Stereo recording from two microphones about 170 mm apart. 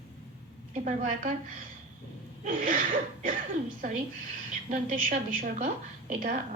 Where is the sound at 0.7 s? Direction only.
50° right (ahead or behind).